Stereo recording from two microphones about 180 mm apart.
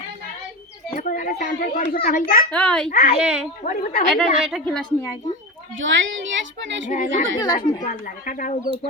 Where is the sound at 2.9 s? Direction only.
55° left (ahead or behind).